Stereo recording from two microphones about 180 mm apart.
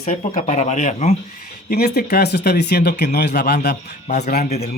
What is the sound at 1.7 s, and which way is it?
Speech, 60° left (ahead or behind).